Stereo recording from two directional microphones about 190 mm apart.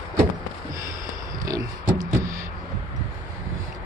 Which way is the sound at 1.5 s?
20° right (ahead or behind).